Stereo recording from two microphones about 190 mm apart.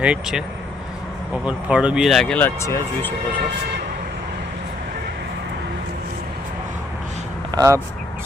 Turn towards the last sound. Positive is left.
turn(degrees=-20)  # may be behind; listen again after turning